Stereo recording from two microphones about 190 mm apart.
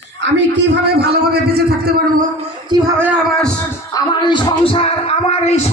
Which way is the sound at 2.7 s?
20° right (ahead or behind).